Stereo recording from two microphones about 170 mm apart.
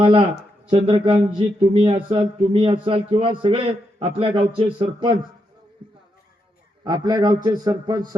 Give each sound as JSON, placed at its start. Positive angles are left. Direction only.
{"t": 0.0, "sound": "a man's voice", "side_deg": -30}
{"t": 6.8, "sound": "a man's voice", "side_deg": -25}